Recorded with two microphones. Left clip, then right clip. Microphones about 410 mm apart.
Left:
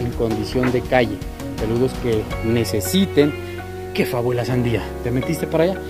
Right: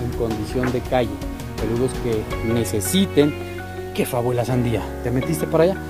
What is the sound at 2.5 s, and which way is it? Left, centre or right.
Speech, centre.